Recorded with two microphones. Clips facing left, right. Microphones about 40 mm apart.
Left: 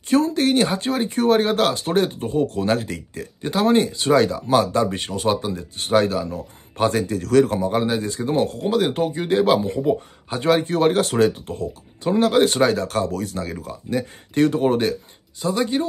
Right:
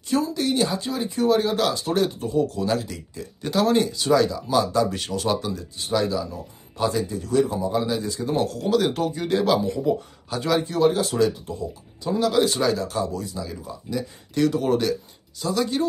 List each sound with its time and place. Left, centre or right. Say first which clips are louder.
0.1 s speech: left 5 dB; left
3.4 s speech: left 2 dB; left
4.8 s speech: left 3 dB; left
5.8 s speech: left 5 dB; left